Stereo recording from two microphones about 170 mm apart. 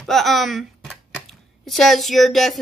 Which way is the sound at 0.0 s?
Centre (ahead or behind).